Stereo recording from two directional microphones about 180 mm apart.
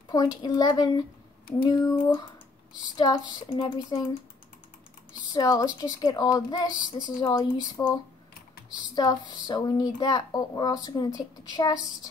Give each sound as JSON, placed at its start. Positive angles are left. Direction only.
{"t": 0.1, "sound": "a woman's voice", "side_deg": 25}
{"t": 5.3, "sound": "a woman's voice", "side_deg": 20}
{"t": 8.9, "sound": "a woman's voice", "side_deg": 25}